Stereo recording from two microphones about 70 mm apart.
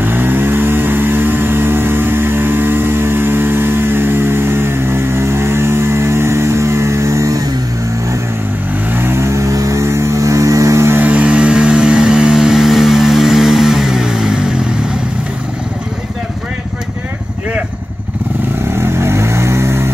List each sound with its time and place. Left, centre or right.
0.0 s vehicle: right
8.9 s a sound: right
11.0 s vehicle: right
18.8 s vehicle: right